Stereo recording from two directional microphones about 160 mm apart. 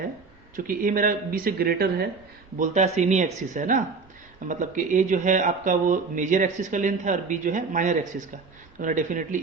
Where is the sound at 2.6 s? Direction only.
45° right (ahead or behind).